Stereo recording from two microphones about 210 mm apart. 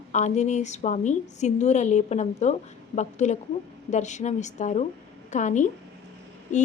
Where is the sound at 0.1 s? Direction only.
35° left (ahead or behind).